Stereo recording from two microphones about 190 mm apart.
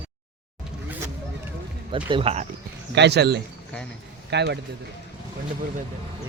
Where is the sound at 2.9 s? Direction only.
65° right (ahead or behind).